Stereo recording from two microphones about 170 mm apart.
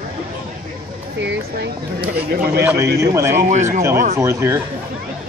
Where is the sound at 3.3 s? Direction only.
45° right (ahead or behind).